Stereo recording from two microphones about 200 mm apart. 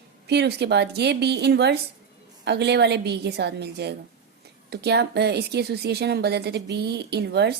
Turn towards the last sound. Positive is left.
turn(degrees=-55)  # may be behind; listen again after turning